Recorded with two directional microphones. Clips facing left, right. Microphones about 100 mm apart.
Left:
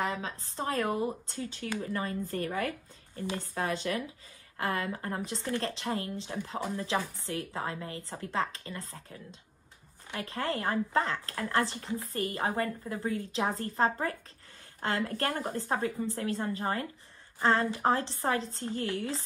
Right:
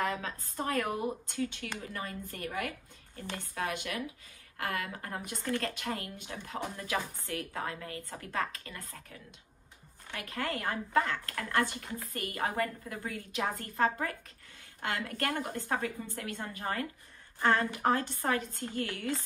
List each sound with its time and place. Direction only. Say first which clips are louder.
0.0 s a woman's voice: even; 20° left (ahead or behind); by 2.7 s 45° left (ahead or behind)
3.2 s a woman's voice: left 4 dB; 15° left (ahead or behind)
3.7 s a woman's voice: left 4 dB; 35° left (ahead or behind)